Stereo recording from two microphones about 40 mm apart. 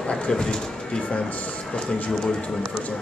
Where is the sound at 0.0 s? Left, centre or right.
Centre.